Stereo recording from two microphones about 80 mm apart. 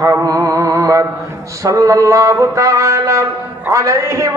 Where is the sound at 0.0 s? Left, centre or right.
Right.